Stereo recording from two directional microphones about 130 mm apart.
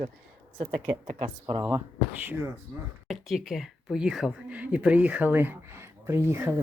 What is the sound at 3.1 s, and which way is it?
Speech, centre (ahead or behind).